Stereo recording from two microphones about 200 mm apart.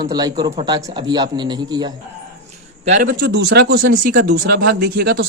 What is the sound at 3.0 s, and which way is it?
Speech, 55° right (ahead or behind).